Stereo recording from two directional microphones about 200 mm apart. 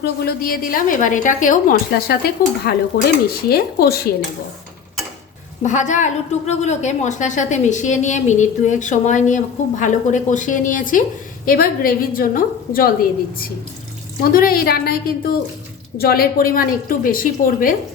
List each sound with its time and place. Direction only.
0.0 s a woman's voice: 50° left (ahead or behind)
5.6 s a woman's voice: 35° left (ahead or behind)